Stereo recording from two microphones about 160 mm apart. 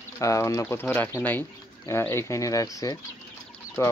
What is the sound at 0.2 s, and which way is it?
Speech, 20° left (ahead or behind).